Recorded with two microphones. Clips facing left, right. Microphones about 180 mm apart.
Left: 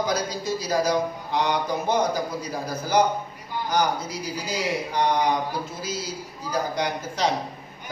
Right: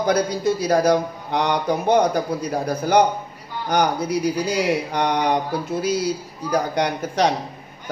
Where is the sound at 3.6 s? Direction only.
65° right (ahead or behind).